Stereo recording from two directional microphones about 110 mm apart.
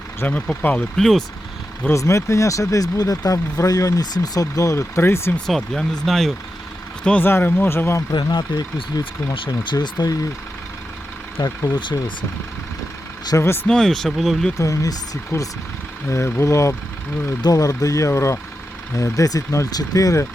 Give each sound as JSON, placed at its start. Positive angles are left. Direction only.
{"t": 0.2, "sound": "speech", "side_deg": 15}
{"t": 1.9, "sound": "speech", "side_deg": 25}
{"t": 5.5, "sound": "speech", "side_deg": 0}
{"t": 7.0, "sound": "speech", "side_deg": 15}
{"t": 8.1, "sound": "speech", "side_deg": 40}
{"t": 11.3, "sound": "speech", "side_deg": 45}
{"t": 13.3, "sound": "speech", "side_deg": 25}
{"t": 13.7, "sound": "speech", "side_deg": 5}
{"t": 14.6, "sound": "speech", "side_deg": 30}